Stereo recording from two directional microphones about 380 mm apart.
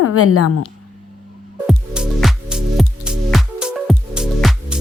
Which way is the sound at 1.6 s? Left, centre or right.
Centre.